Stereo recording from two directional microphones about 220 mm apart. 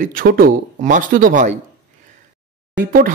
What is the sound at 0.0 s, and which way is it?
A man's voice, 40° right (ahead or behind).